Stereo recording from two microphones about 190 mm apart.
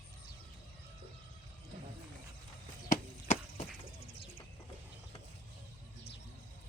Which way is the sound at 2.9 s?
40° left (ahead or behind).